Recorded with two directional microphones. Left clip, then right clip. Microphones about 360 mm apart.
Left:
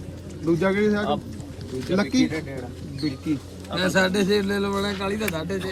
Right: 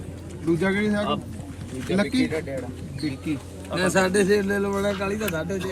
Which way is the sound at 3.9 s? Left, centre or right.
Centre.